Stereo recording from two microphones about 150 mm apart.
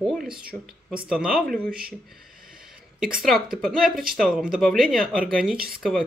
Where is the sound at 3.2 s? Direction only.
Centre (ahead or behind).